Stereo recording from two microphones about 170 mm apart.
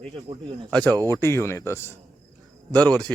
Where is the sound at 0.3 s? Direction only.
30° right (ahead or behind).